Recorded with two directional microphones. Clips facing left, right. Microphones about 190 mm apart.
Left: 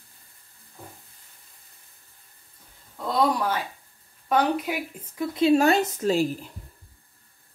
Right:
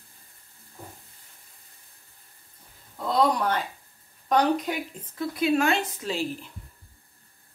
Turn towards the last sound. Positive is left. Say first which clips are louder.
# left 7 dB
turn(degrees=45)  # may be behind; listen again after turning